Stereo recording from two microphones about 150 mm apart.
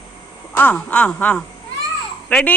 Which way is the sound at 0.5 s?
10° left (ahead or behind).